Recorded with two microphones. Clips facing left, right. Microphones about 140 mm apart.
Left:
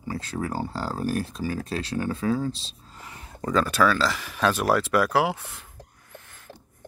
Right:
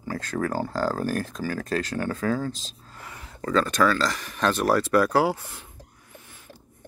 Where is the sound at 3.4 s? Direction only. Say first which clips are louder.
Even; 10° left (ahead or behind).